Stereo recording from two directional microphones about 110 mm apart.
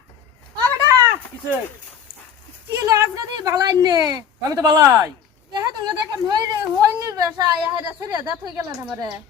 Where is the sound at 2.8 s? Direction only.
30° right (ahead or behind).